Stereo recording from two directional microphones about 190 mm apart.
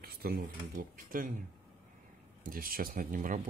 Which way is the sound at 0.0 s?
50° right (ahead or behind).